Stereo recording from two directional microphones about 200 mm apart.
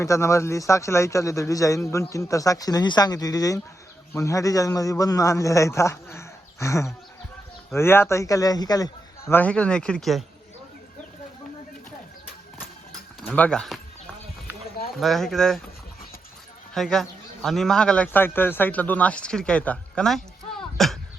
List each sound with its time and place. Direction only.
0.0 s a man's voice: 15° left (ahead or behind)
13.2 s speech: 5° left (ahead or behind)
14.8 s speech: centre (ahead or behind)
16.7 s a man's voice: centre (ahead or behind)